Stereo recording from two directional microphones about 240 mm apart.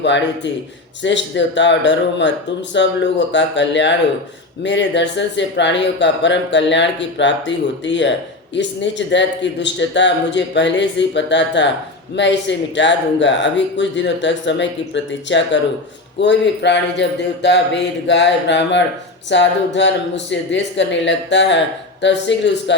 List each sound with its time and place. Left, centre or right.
1.0 s speech: left